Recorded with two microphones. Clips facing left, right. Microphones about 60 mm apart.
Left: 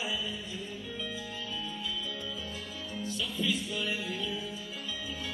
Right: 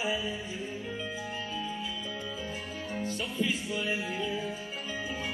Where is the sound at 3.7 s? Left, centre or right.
Centre.